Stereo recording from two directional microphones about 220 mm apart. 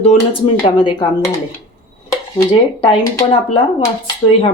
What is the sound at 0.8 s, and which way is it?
Speech, 20° left (ahead or behind).